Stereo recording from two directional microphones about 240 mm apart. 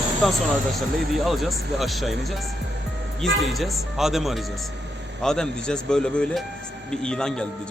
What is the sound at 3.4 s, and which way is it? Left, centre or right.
Speech, centre.